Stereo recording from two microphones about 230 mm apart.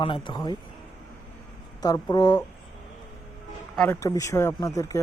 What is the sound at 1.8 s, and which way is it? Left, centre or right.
Speech, centre.